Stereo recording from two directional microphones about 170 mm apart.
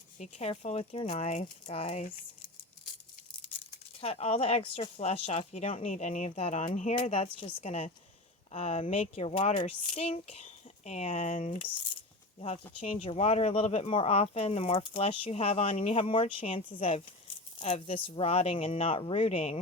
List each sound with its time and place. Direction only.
0.2 s speech: 40° left (ahead or behind)
4.0 s speech: 35° left (ahead or behind)
6.9 s speech: 35° left (ahead or behind)
12.8 s speech: 35° left (ahead or behind)